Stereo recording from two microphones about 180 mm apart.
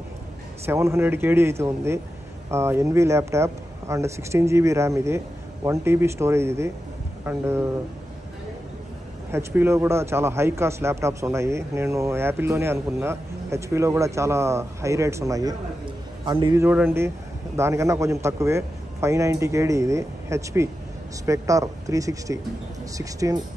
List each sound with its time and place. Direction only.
0.7 s a man's voice: 15° right (ahead or behind)
9.3 s a man's voice: 15° right (ahead or behind)
16.6 s a man's voice: 10° right (ahead or behind)